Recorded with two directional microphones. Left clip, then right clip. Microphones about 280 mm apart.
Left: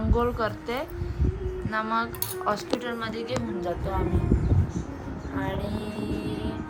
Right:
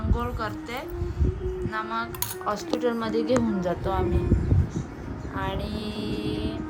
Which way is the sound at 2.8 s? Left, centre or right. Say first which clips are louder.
Right 6 dB; centre.